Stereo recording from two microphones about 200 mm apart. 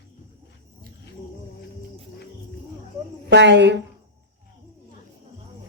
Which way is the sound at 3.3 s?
60° right (ahead or behind).